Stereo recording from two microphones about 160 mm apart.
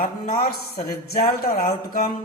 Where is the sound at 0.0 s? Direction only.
70° left (ahead or behind).